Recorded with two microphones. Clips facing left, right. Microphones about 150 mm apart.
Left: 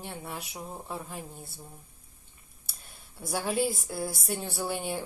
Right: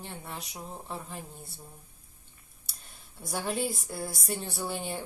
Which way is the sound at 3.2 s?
Centre (ahead or behind).